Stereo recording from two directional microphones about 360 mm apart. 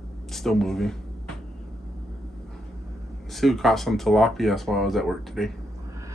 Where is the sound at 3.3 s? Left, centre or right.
Centre.